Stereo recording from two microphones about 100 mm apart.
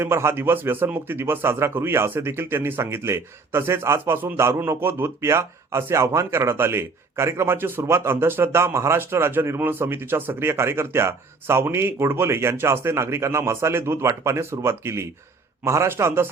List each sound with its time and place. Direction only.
0.0 s a man's voice: 25° right (ahead or behind)